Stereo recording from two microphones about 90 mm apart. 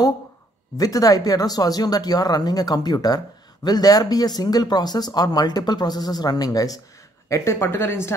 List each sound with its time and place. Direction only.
0.7 s a woman's voice: 40° left (ahead or behind)